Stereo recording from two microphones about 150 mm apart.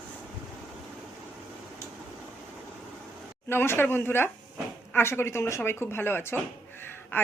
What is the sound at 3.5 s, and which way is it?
Speech, 15° left (ahead or behind).